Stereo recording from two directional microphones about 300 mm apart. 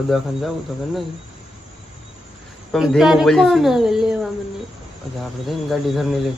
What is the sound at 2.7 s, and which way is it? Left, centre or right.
Speech, centre.